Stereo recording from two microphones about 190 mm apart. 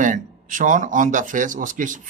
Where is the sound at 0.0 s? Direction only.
45° right (ahead or behind).